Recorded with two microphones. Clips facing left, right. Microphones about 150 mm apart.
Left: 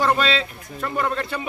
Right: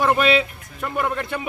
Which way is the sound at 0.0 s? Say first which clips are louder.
Right 3 dB; 10° right (ahead or behind).